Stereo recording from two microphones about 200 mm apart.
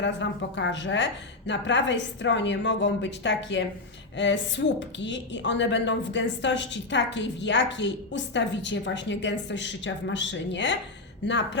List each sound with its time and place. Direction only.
0.0 s a woman's voice: 65° left (ahead or behind)